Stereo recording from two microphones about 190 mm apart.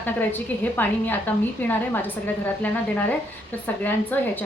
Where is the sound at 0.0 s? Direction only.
10° left (ahead or behind).